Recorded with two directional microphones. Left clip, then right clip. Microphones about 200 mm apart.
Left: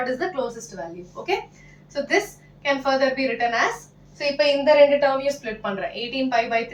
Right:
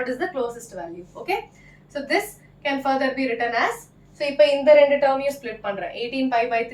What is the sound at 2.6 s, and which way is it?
Speech, 15° right (ahead or behind).